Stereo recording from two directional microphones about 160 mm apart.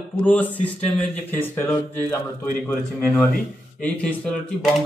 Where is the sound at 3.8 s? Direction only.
5° left (ahead or behind).